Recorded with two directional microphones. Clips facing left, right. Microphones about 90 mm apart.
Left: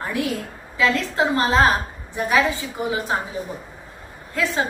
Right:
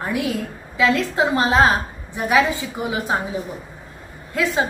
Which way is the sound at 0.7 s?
20° right (ahead or behind).